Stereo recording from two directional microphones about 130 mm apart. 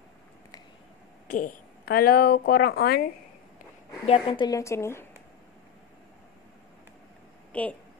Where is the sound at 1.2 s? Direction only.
90° left.